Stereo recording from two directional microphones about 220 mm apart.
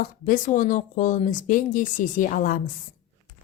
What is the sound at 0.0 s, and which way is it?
Speech, 40° left (ahead or behind).